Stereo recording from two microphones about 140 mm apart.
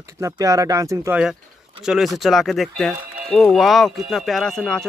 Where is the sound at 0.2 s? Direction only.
25° right (ahead or behind).